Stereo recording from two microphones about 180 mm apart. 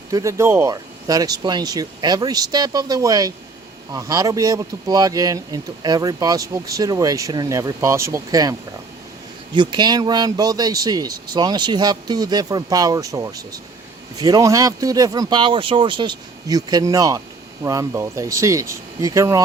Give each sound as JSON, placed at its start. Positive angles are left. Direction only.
{"t": 0.1, "sound": "speech", "side_deg": -15}
{"t": 9.6, "sound": "speech", "side_deg": -25}